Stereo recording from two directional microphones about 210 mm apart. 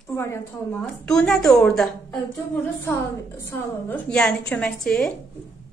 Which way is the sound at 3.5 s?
10° left (ahead or behind).